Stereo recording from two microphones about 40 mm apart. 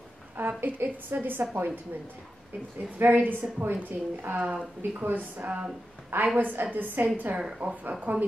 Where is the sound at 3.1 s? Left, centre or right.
Right.